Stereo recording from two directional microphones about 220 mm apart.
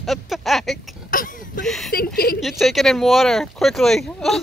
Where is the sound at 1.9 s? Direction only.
45° left (ahead or behind).